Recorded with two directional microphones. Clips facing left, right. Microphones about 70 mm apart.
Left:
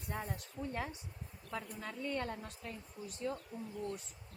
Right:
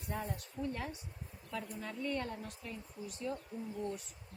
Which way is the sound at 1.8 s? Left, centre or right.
Centre.